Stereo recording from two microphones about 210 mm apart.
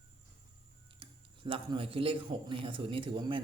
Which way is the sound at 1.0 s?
25° right (ahead or behind).